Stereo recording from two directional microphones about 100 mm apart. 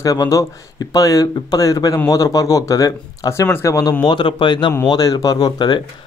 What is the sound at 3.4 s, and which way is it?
Speech, 20° left (ahead or behind).